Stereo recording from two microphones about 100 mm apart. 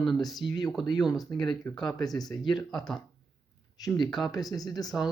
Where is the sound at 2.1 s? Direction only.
40° left (ahead or behind).